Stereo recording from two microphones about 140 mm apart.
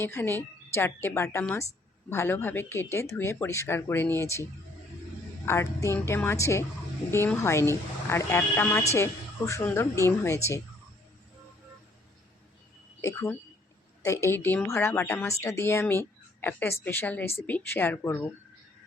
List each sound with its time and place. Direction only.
0.0 s a woman's voice: 15° left (ahead or behind)
5.5 s speech: 20° left (ahead or behind)
13.0 s a woman's voice: 20° left (ahead or behind)